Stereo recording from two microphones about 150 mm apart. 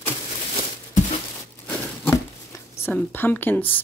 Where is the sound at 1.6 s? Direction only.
20° left (ahead or behind).